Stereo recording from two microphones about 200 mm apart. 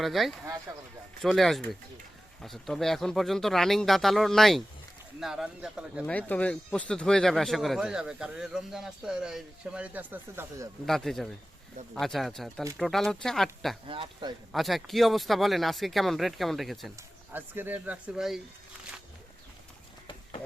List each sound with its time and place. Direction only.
0.0 s speech: centre (ahead or behind)
0.7 s speech: 15° right (ahead or behind)
1.2 s speech: centre (ahead or behind)
6.1 s speech: 5° left (ahead or behind); by 10.7 s 10° right (ahead or behind)
10.8 s speech: centre (ahead or behind)
13.8 s speech: 25° right (ahead or behind)
14.5 s speech: centre (ahead or behind)